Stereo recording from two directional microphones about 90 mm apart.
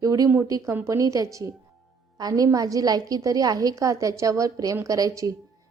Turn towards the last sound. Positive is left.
turn(degrees=-40)  # may be behind; listen again after turning